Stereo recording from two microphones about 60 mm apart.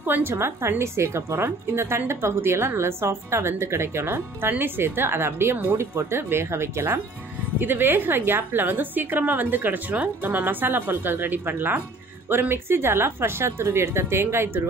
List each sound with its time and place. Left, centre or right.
0.0 s a woman's voice: right
7.6 s a woman's voice: right